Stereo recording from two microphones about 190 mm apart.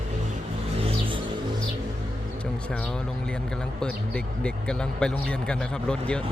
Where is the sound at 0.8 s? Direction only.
30° right (ahead or behind).